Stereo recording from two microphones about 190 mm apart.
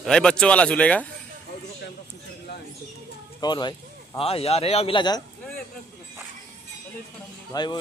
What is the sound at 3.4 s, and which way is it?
Speech, 25° left (ahead or behind).